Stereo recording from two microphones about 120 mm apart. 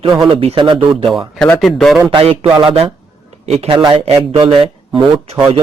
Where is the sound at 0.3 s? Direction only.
45° right (ahead or behind).